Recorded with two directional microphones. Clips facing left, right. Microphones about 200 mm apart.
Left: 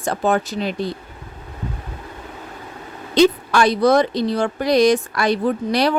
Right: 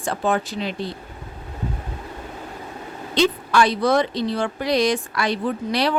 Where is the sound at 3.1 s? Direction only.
45° left (ahead or behind).